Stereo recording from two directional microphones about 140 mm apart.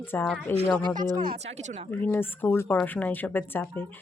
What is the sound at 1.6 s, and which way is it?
Speech, 55° right (ahead or behind).